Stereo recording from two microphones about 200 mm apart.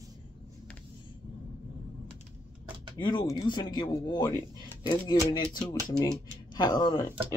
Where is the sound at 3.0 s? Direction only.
20° left (ahead or behind).